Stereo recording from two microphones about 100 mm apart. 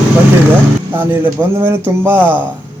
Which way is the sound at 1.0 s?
20° right (ahead or behind).